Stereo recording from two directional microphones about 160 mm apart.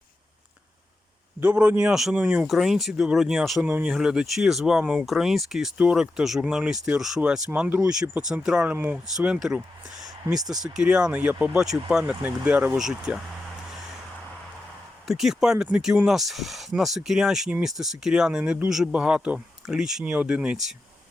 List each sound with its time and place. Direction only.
1.4 s speech: 10° right (ahead or behind)
15.0 s speech: centre (ahead or behind)